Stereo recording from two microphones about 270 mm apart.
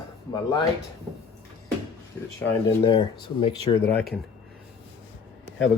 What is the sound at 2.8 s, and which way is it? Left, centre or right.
Speech, centre.